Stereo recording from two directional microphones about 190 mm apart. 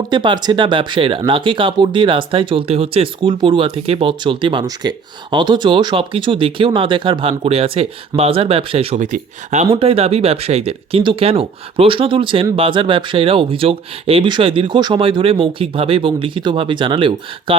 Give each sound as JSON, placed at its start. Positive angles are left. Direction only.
{"t": 0.1, "sound": "speech", "side_deg": -25}